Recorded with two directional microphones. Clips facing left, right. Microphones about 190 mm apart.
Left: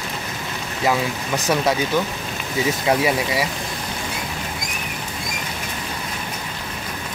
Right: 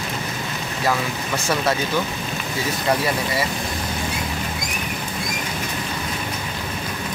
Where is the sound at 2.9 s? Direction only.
10° left (ahead or behind).